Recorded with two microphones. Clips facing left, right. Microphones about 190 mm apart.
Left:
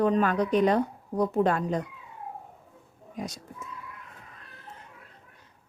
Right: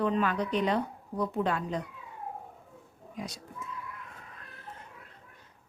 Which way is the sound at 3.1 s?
45° left (ahead or behind).